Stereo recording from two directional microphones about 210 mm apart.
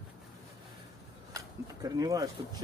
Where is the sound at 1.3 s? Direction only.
15° right (ahead or behind).